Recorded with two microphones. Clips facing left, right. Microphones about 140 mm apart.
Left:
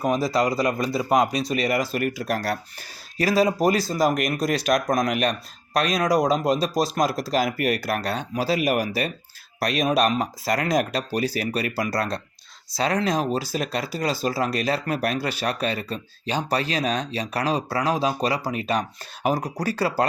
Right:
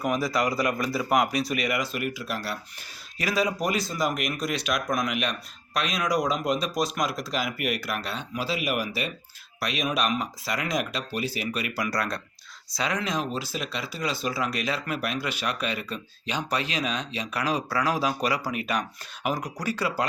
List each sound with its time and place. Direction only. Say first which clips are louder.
0.0 s speech: left 4 dB; 25° left (ahead or behind)